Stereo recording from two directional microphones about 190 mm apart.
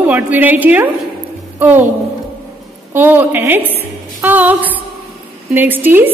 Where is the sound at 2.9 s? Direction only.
10° right (ahead or behind).